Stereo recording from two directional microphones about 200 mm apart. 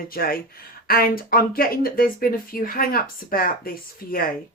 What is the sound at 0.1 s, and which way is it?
Speech, 45° left (ahead or behind).